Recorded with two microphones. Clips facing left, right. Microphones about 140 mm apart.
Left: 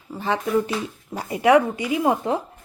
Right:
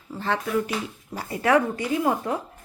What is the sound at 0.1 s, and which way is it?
Speech, 15° left (ahead or behind).